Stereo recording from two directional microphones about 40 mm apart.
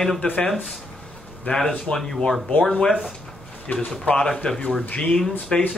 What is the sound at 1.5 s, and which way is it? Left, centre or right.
Speech, left.